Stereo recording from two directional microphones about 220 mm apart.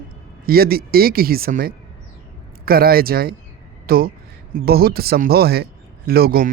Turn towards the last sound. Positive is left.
turn(degrees=-45)  # may be behind; listen again after turning